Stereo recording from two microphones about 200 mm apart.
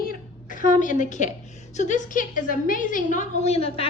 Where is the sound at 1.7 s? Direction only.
35° left (ahead or behind).